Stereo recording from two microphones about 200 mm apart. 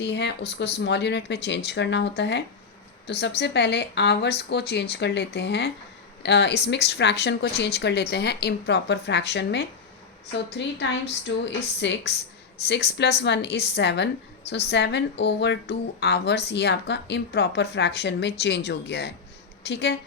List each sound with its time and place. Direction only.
0.0 s a woman's voice: 60° left (ahead or behind)